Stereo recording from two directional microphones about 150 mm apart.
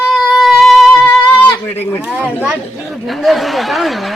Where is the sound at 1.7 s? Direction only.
15° left (ahead or behind).